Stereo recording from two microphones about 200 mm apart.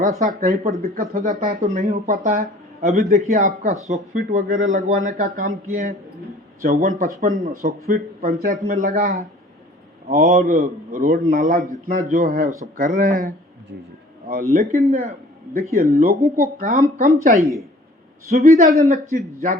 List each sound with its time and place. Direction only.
0.0 s speech: 40° right (ahead or behind)
14.5 s speech: 40° right (ahead or behind)